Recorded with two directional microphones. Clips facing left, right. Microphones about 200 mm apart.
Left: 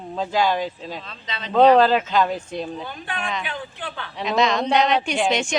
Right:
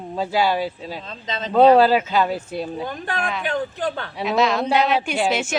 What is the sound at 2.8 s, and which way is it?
Speech, 45° right (ahead or behind).